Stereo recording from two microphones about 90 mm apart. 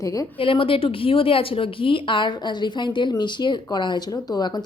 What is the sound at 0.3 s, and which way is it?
A woman's voice, 80° left.